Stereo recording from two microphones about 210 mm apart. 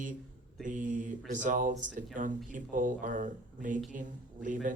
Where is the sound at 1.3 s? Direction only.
40° right (ahead or behind).